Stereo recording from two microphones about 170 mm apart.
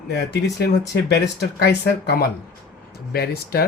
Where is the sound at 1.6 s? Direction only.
80° left.